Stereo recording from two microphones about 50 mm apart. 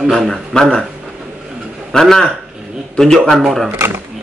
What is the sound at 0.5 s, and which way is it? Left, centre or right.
Speech, centre.